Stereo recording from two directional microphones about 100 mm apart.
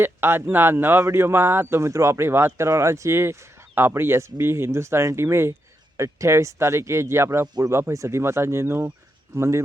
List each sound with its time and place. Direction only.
0.0 s speech: 25° right (ahead or behind)